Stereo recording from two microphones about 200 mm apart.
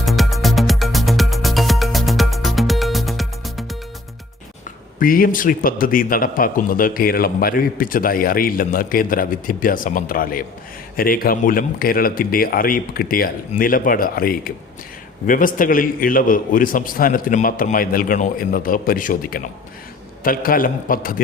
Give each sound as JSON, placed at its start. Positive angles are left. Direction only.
{"t": 0.0, "sound": "music", "side_deg": 0}
{"t": 4.9, "sound": "a man's voice", "side_deg": 45}